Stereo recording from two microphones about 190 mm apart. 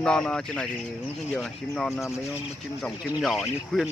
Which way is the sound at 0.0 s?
5° left (ahead or behind).